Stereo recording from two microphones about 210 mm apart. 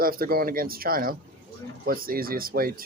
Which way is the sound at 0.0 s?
45° right (ahead or behind).